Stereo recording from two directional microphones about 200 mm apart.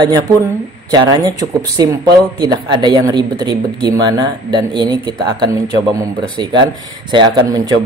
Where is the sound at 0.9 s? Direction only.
20° right (ahead or behind).